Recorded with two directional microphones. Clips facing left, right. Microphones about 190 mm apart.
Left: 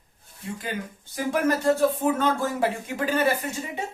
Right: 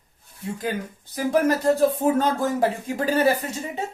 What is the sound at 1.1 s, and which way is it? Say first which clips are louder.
Speech: right 3 dB; 35° right (ahead or behind).